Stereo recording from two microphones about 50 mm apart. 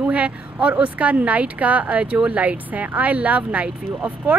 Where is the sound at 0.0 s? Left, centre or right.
Right.